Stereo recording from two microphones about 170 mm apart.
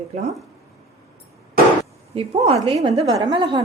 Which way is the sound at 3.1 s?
25° right (ahead or behind).